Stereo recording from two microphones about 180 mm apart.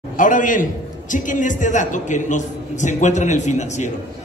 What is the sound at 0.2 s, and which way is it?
A man's voice, 45° left (ahead or behind).